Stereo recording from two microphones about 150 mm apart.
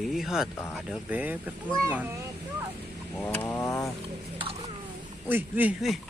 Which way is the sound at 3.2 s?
10° left (ahead or behind).